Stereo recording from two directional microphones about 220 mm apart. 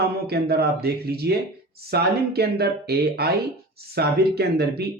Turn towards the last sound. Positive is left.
turn(degrees=-45)  # may be behind; listen again after turning